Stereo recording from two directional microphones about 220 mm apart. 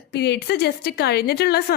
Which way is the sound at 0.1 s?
50° left (ahead or behind).